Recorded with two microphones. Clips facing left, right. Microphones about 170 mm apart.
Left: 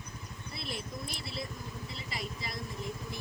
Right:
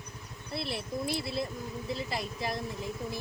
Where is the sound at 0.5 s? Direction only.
65° right (ahead or behind).